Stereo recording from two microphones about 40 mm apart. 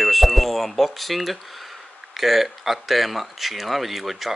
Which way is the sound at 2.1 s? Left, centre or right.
Centre.